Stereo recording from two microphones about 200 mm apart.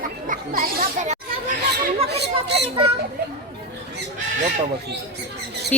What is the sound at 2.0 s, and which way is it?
Speech, 55° right (ahead or behind).